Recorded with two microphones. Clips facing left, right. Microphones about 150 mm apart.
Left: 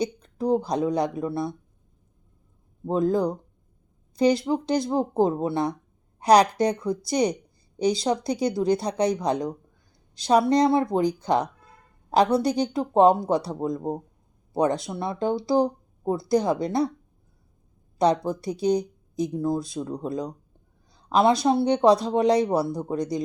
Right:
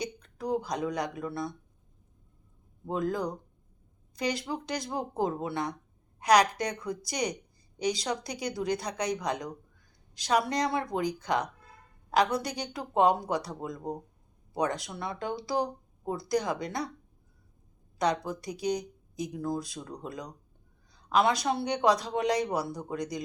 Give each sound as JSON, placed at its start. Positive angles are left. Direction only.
{"t": 0.0, "sound": "speech", "side_deg": 30}
{"t": 2.8, "sound": "speech", "side_deg": 30}
{"t": 18.0, "sound": "speech", "side_deg": 30}